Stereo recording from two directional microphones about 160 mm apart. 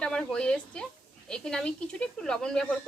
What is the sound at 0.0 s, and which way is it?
Speech, 5° left (ahead or behind).